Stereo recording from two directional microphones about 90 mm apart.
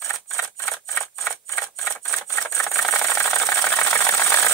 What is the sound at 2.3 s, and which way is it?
Sawing, 35° left (ahead or behind).